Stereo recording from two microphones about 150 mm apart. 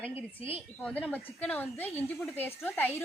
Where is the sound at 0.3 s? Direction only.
40° left (ahead or behind).